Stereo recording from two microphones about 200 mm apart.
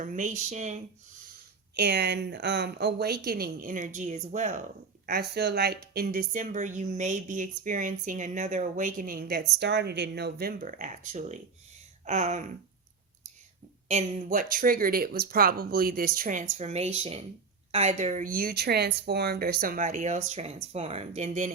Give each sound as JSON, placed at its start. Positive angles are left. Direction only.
{"t": 0.0, "sound": "a woman's voice", "side_deg": -35}
{"t": 1.7, "sound": "a woman's voice", "side_deg": -55}
{"t": 5.0, "sound": "a woman's voice", "side_deg": -50}
{"t": 13.8, "sound": "a woman's voice", "side_deg": -35}